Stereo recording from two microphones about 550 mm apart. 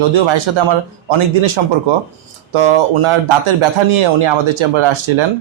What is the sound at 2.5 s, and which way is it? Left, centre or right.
Speech, right.